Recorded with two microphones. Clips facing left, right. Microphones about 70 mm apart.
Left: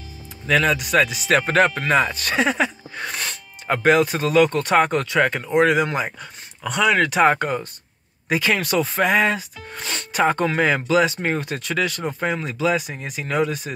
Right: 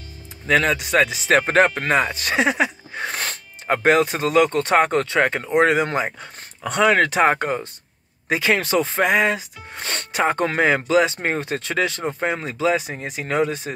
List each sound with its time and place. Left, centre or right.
0.5 s speech: right
7.2 s speech: right